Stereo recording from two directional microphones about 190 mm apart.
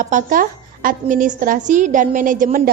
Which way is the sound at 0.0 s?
40° right (ahead or behind).